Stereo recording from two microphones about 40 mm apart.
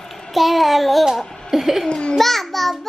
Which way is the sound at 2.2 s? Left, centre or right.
Centre.